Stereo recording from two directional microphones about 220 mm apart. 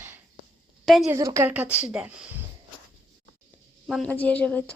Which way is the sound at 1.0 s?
15° right (ahead or behind).